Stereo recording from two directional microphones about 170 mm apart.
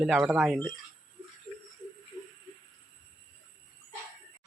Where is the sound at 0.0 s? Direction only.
Centre (ahead or behind).